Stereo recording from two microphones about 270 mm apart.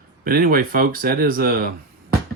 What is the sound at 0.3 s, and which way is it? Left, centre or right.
Speech, right.